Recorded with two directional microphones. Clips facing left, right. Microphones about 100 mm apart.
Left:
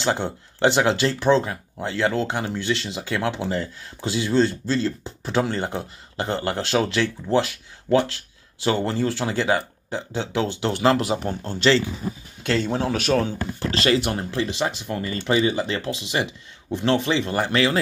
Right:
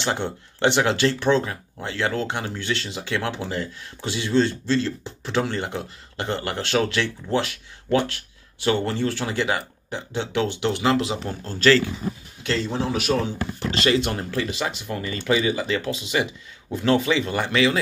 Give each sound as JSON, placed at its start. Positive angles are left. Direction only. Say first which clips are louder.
{"t": 0.0, "sound": "speech", "louder": "left 2 dB", "side_deg": 30}
{"t": 12.4, "sound": "speech", "louder": "left 2 dB", "side_deg": 55}
{"t": 13.9, "sound": "speech", "louder": "left 1 dB", "side_deg": 25}